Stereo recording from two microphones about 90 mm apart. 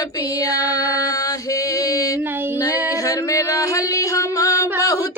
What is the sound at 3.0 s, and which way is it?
Singing, 40° left (ahead or behind).